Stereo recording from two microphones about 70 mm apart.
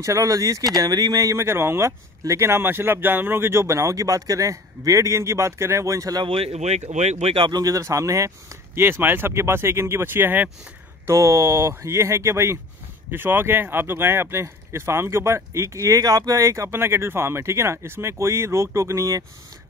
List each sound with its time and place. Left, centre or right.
0.0 s speech: right
0.7 s speech: right
1.4 s speech: right
7.4 s speech: right
8.7 s speech: right
11.1 s speech: right
13.1 s speech: right